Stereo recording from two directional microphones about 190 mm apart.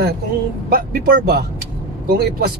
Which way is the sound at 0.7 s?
50° right (ahead or behind).